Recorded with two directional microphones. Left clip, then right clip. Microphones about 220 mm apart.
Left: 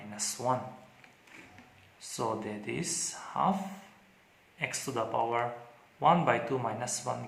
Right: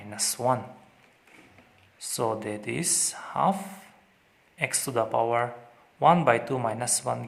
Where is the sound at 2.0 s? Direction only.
45° right (ahead or behind).